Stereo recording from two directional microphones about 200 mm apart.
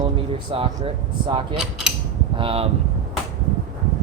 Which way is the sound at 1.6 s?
Centre (ahead or behind).